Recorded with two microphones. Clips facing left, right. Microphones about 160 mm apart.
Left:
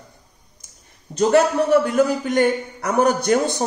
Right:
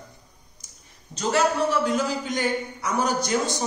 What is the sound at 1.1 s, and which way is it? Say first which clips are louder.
A man's voice: left 7 dB; 60° left (ahead or behind).